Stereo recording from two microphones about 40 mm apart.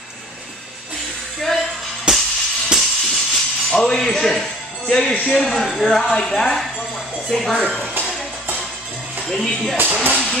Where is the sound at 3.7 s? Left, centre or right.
Centre.